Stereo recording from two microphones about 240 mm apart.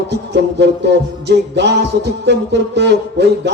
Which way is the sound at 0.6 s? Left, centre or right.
Right.